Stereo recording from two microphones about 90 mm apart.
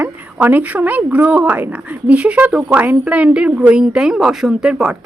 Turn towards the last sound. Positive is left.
turn(degrees=-5)  # may be behind; listen again after turning